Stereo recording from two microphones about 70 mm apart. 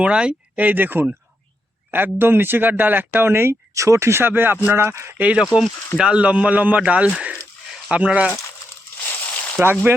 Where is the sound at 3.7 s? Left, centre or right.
Right.